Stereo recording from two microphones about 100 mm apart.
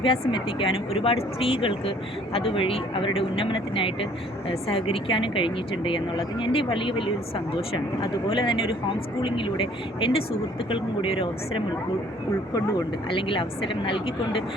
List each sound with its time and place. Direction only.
0.0 s speech: 55° left (ahead or behind)
13.1 s speech: 60° left (ahead or behind)